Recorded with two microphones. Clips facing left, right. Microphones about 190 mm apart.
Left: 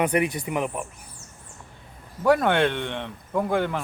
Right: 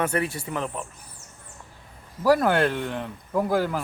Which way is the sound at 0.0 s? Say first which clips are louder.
Left 3 dB; 15° left (ahead or behind).